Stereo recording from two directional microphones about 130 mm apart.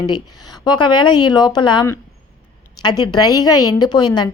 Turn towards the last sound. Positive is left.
turn(degrees=30)  # may be behind; listen again after turning